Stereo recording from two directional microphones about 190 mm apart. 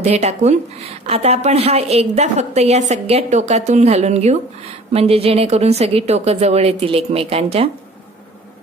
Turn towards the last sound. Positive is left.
turn(degrees=-30)  # may be behind; listen again after turning